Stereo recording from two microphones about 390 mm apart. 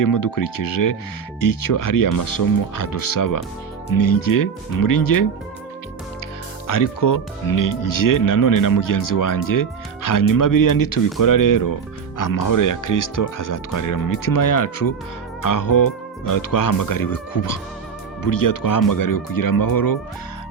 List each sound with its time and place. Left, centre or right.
0.0 s speech: left
6.7 s speech: left